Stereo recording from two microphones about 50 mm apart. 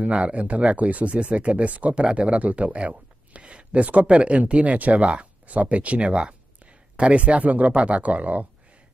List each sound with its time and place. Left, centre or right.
0.0 s speech: right